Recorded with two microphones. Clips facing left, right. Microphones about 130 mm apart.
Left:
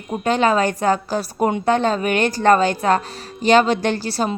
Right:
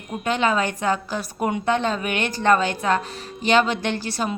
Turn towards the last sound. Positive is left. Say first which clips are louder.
# left 4 dB
turn(degrees=35)  # may be behind; listen again after turning